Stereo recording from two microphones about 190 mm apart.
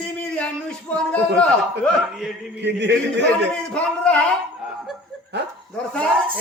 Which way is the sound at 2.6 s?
65° right (ahead or behind).